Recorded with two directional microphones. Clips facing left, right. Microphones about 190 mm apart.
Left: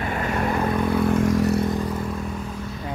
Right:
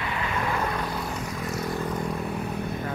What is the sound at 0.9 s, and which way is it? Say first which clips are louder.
Vehicle: left 12 dB; 55° left (ahead or behind).